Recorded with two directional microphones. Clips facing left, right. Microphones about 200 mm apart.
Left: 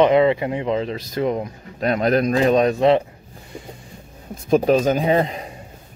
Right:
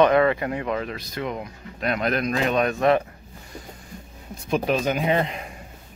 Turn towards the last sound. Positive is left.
turn(degrees=35)  # may be behind; listen again after turning